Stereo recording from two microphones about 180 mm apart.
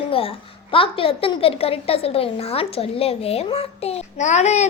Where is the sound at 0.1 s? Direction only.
30° left (ahead or behind).